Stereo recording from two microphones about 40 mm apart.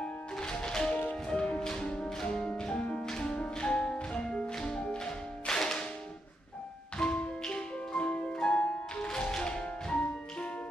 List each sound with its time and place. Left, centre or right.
0.4 s music: centre
3.1 s music: centre
7.0 s music: centre
8.0 s music: left
9.1 s music: centre